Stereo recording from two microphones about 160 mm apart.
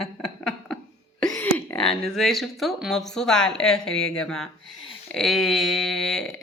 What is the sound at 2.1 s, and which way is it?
Speech, centre (ahead or behind).